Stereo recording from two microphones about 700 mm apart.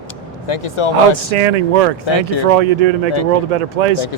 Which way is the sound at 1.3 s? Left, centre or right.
Right.